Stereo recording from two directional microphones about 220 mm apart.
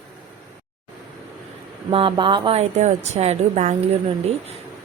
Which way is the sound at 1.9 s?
25° right (ahead or behind).